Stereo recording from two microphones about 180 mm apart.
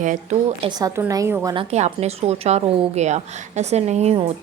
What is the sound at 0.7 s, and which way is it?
Speech, 20° right (ahead or behind).